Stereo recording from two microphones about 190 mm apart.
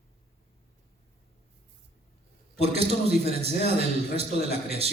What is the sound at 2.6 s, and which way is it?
A man's voice, 30° right (ahead or behind).